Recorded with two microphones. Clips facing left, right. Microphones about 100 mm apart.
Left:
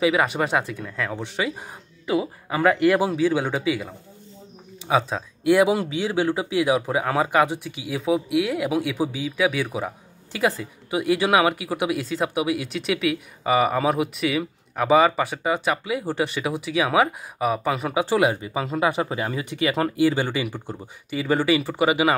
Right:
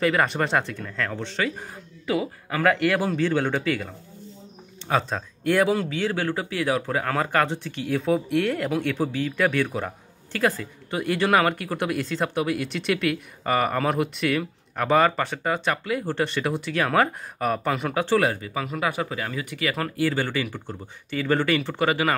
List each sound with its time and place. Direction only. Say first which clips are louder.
0.0 s speech: left 1 dB; 5° left (ahead or behind)